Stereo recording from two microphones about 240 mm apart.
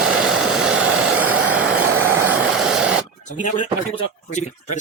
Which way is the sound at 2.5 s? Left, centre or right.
Centre.